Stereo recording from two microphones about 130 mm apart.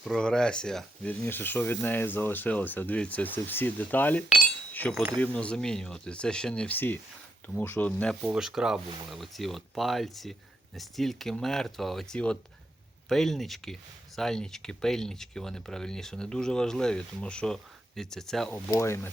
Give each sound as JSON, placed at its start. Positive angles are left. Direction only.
{"t": 0.0, "sound": "speech", "side_deg": 5}
{"t": 8.2, "sound": "speech", "side_deg": -5}
{"t": 18.7, "sound": "speech", "side_deg": 20}